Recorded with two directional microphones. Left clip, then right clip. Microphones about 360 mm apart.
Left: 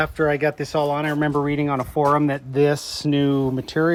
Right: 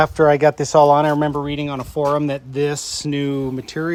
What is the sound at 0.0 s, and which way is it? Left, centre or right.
Speech, centre.